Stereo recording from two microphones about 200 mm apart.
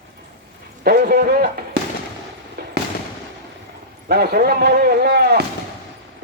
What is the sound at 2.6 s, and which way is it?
Fireworks, 50° right (ahead or behind).